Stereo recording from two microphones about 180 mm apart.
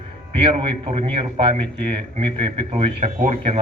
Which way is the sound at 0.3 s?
30° right (ahead or behind).